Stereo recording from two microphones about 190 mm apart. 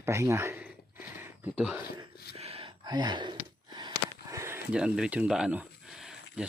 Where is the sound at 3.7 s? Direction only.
20° right (ahead or behind); by 6.5 s 5° right (ahead or behind).